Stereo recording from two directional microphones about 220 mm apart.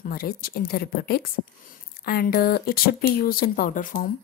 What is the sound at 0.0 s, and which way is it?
A woman's voice, 40° left (ahead or behind).